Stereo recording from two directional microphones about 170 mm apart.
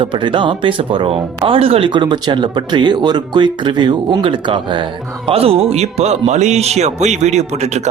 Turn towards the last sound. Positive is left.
turn(degrees=-40)  # may be behind; listen again after turning